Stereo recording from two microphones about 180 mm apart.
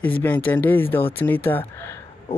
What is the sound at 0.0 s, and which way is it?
Speech, 10° left (ahead or behind).